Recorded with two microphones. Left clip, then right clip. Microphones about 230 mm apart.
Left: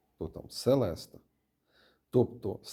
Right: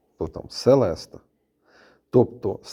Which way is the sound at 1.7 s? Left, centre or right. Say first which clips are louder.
Right 10 dB; right.